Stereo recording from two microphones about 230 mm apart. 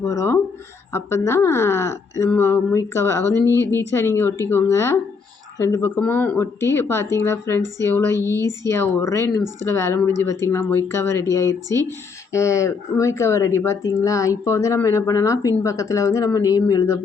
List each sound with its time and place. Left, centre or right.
0.0 s speech: centre
8.2 s speech: centre
8.6 s speech: centre
11.7 s speech: centre
12.3 s speech: centre